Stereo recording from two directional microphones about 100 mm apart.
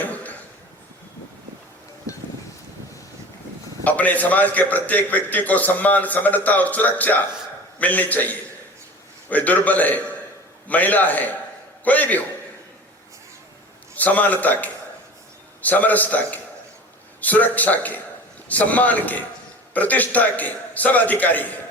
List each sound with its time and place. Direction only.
0.0 s a sound: 15° left (ahead or behind)
3.8 s a man's voice: 15° left (ahead or behind)
13.9 s a man's voice: 15° left (ahead or behind)